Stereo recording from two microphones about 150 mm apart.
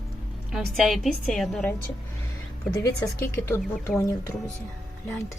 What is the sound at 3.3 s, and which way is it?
Speech, 15° left (ahead or behind).